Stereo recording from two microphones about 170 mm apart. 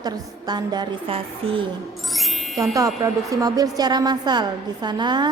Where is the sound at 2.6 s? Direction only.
20° right (ahead or behind).